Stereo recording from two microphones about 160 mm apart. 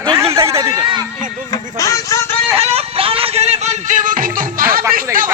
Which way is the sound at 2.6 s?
40° right (ahead or behind).